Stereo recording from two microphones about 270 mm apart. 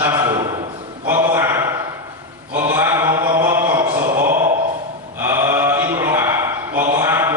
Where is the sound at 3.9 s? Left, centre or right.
Right.